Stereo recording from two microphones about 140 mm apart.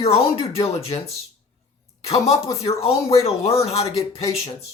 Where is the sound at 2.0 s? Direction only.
45° left (ahead or behind).